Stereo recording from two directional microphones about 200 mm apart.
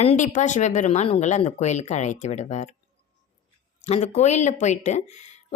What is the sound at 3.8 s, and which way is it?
Speech, 35° left (ahead or behind).